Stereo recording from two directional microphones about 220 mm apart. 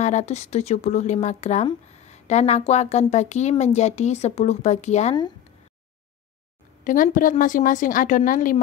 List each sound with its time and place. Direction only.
0.0 s speech: 30° left (ahead or behind)
6.8 s speech: 35° left (ahead or behind)